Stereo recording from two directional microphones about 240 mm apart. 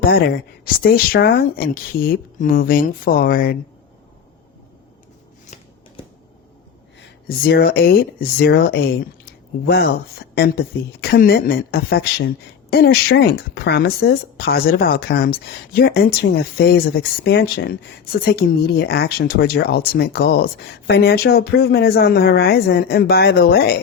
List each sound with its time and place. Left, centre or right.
0.1 s a woman's voice: left
7.0 s a woman's voice: left